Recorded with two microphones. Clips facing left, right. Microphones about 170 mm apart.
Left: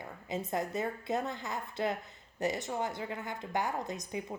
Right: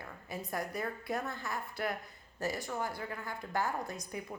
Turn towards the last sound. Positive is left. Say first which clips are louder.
# left 3 dB
turn(degrees=20)  # may be behind; listen again after turning